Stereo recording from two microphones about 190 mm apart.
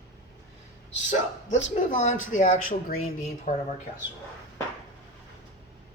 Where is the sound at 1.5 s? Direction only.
40° left (ahead or behind).